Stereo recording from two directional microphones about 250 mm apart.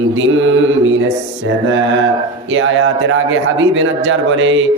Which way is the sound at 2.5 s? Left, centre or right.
Right.